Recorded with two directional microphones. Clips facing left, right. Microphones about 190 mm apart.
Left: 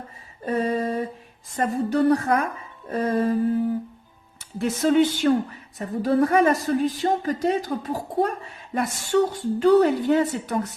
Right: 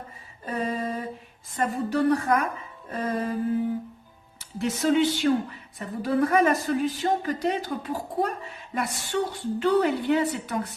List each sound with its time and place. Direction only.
0.4 s mantra: 40° left (ahead or behind)
1.5 s speech: 40° left (ahead or behind)
4.4 s speech: 50° left (ahead or behind)